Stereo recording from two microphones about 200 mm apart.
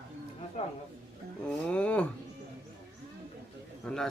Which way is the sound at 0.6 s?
30° left (ahead or behind).